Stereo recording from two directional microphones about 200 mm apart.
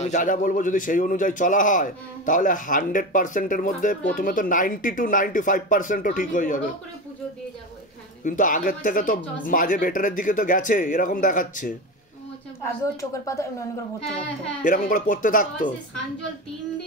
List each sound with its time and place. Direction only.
0.0 s a man's voice: 40° left (ahead or behind)
8.2 s a man's voice: 40° left (ahead or behind)
12.6 s speech: 15° left (ahead or behind)
13.9 s child singing: 5° left (ahead or behind)
14.6 s a man's voice: 40° left (ahead or behind)